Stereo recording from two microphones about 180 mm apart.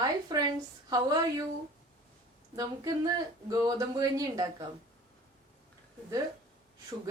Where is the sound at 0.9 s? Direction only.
20° right (ahead or behind).